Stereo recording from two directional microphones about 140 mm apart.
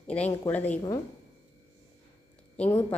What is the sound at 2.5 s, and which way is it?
Speech, 10° left (ahead or behind).